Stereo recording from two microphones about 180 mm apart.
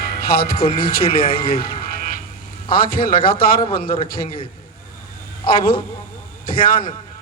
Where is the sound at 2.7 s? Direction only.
55° left (ahead or behind).